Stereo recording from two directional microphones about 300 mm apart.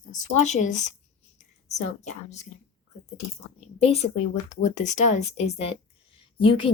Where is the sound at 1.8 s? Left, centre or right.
Left.